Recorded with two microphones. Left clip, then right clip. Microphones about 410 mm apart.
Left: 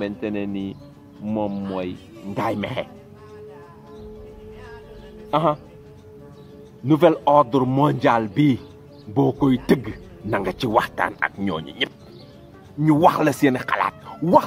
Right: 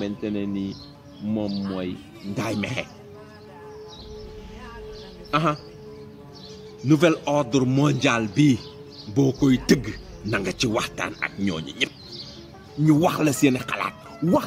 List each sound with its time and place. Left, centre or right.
0.0 s speech: left
5.3 s speech: centre
6.9 s speech: centre